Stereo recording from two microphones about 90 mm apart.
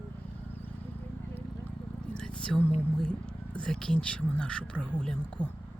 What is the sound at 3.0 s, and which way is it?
Speech, 10° left (ahead or behind).